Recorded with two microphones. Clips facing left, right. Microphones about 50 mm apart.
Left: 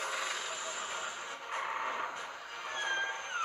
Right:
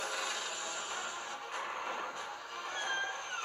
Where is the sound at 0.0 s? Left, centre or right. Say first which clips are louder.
Left 1 dB; left.